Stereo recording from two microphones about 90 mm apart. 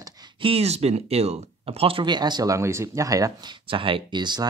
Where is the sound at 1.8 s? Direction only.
90° right.